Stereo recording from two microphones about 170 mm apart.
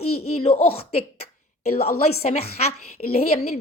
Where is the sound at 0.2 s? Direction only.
35° left (ahead or behind).